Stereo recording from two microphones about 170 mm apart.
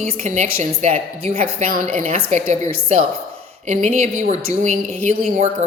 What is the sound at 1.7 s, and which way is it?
Speech, 50° right (ahead or behind).